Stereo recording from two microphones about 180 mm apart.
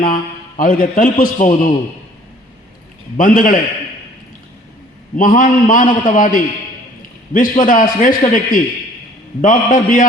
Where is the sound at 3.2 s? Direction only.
50° left (ahead or behind).